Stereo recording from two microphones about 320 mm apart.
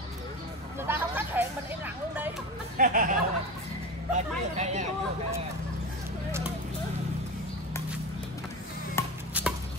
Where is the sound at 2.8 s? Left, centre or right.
Right.